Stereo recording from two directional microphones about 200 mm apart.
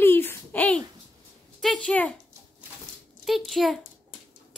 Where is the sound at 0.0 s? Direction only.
10° left (ahead or behind).